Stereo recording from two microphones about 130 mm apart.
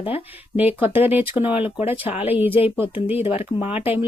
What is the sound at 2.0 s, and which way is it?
Speech, 50° left (ahead or behind).